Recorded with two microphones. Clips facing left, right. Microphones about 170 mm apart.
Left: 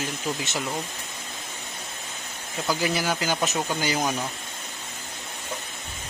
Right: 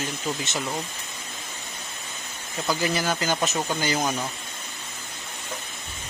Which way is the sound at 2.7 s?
10° left (ahead or behind).